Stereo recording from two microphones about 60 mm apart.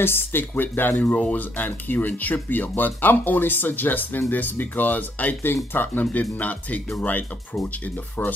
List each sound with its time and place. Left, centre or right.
0.0 s speech: left